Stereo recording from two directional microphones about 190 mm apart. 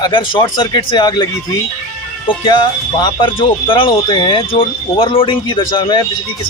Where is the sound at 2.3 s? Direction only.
25° left (ahead or behind).